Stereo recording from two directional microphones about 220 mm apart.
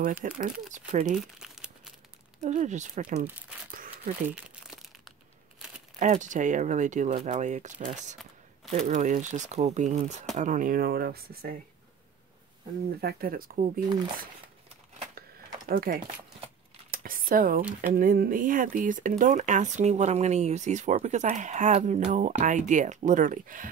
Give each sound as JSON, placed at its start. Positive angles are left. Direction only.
{"t": 0.4, "sound": "speech", "side_deg": -35}
{"t": 1.1, "sound": "crumpling", "side_deg": 0}
{"t": 2.4, "sound": "speech", "side_deg": -35}
{"t": 3.7, "sound": "a sound", "side_deg": -40}
{"t": 4.3, "sound": "crumpling", "side_deg": 0}
{"t": 5.9, "sound": "speech", "side_deg": -35}
{"t": 13.0, "sound": "speech", "side_deg": -40}
{"t": 15.7, "sound": "speech", "side_deg": -40}
{"t": 17.6, "sound": "speech", "side_deg": -5}
{"t": 17.9, "sound": "speech", "side_deg": -40}